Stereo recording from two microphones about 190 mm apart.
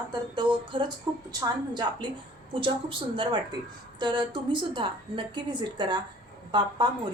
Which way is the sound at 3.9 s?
25° right (ahead or behind).